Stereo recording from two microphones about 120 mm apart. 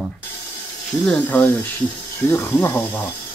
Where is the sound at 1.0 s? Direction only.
15° left (ahead or behind).